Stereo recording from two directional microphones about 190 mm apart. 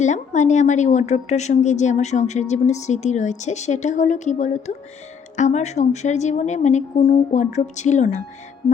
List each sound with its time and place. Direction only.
0.0 s a woman's voice: 40° left (ahead or behind)